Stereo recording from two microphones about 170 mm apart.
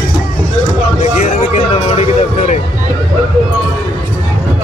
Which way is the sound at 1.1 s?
40° left (ahead or behind).